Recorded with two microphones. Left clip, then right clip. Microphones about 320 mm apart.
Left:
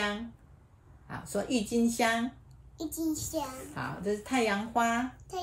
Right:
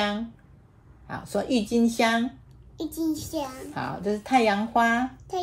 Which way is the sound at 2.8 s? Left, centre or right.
Centre.